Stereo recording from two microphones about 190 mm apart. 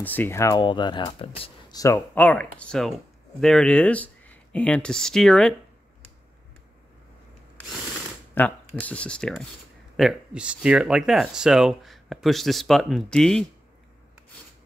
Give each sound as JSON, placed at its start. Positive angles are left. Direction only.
{"t": 0.0, "sound": "speech", "side_deg": 10}
{"t": 1.8, "sound": "speech", "side_deg": 15}
{"t": 8.4, "sound": "speech", "side_deg": 10}